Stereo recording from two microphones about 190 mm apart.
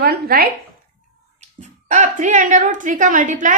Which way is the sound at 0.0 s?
55° right (ahead or behind).